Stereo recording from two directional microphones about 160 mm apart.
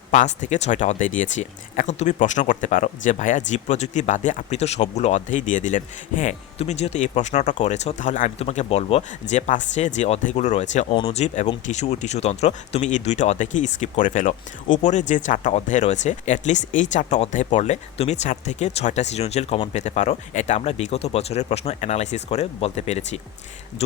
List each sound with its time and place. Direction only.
0.4 s speech: 50° left (ahead or behind)